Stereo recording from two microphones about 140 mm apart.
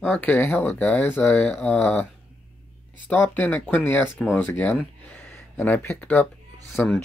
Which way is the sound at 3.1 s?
10° left (ahead or behind).